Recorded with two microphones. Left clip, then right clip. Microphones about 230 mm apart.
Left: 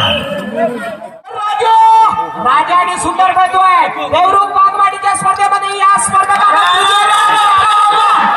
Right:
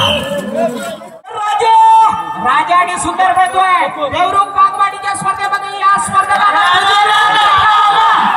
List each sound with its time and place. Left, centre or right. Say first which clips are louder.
1.4 s a man's voice: even; centre; by 4.4 s left
5.0 s music: left 5 dB; left